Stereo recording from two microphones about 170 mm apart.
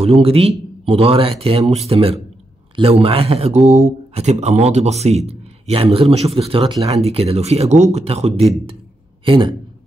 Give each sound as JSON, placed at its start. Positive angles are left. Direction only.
{"t": 0.0, "sound": "speech", "side_deg": -35}